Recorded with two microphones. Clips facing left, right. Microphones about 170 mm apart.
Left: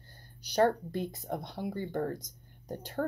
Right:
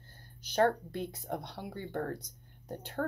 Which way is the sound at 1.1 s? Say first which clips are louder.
Left 2 dB; 10° left (ahead or behind).